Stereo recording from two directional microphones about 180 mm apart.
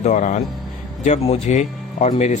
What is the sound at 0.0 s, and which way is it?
Speech, 40° left (ahead or behind).